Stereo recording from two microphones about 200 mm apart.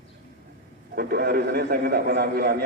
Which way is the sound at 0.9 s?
50° right (ahead or behind).